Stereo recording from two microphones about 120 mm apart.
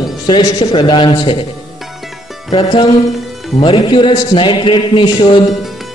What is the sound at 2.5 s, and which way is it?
A man's voice, 45° left (ahead or behind).